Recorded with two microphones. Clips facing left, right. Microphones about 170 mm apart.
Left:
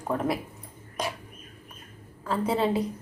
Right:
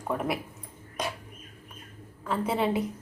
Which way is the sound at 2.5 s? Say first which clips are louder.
Left 2 dB; 10° right (ahead or behind).